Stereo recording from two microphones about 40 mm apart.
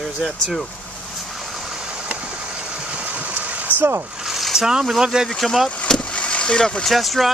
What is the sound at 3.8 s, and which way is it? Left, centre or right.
Speech, right.